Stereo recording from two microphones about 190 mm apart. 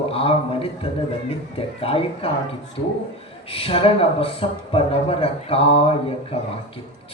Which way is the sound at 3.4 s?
30° left (ahead or behind).